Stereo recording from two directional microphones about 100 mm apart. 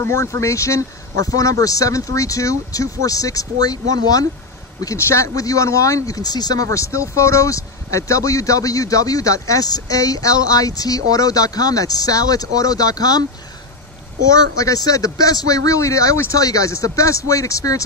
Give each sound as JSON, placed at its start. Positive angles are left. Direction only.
{"t": 0.0, "sound": "speech", "side_deg": 25}
{"t": 14.3, "sound": "speech", "side_deg": 35}